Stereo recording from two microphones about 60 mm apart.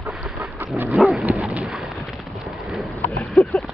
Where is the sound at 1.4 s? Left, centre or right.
Right.